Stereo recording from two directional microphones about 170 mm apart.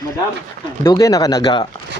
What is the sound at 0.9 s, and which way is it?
Speech, 20° left (ahead or behind).